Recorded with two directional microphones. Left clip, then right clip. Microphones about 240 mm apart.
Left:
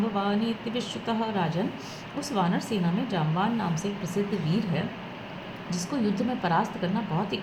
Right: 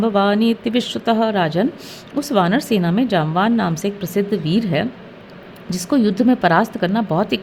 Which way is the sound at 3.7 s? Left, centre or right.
Right.